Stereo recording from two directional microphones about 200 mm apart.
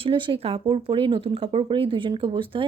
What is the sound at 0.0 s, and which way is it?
Speech, 25° right (ahead or behind).